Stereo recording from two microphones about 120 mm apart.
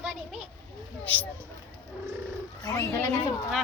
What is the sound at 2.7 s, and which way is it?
Speech, 25° left (ahead or behind).